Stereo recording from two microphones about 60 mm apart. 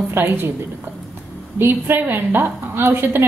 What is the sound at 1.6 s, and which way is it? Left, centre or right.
A woman's voice, right.